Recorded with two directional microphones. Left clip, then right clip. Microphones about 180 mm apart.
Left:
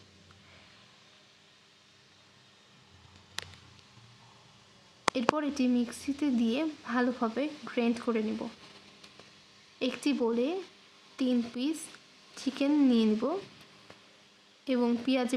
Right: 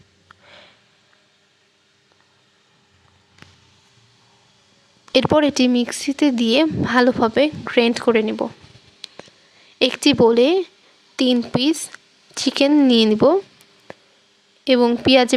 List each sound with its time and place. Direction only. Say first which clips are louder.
5.1 s speech: right 18 dB; 55° right (ahead or behind)
9.7 s speech: right 15 dB; 55° right (ahead or behind)
14.6 s speech: right 15 dB; 50° right (ahead or behind)